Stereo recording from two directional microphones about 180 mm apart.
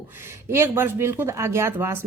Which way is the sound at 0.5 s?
15° right (ahead or behind).